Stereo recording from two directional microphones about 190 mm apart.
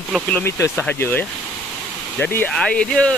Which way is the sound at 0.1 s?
10° left (ahead or behind).